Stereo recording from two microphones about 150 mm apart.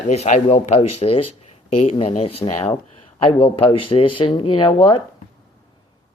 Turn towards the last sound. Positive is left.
turn(degrees=35)  # may be behind; listen again after turning